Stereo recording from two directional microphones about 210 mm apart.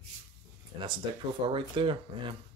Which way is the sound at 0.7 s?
20° right (ahead or behind).